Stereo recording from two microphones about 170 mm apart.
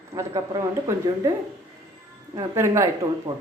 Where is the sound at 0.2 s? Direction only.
20° right (ahead or behind).